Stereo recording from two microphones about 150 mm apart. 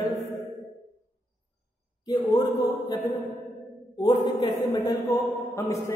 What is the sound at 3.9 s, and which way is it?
Mantra, 25° left (ahead or behind).